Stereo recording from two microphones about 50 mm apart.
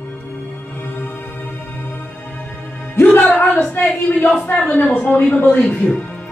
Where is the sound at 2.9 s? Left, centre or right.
Left.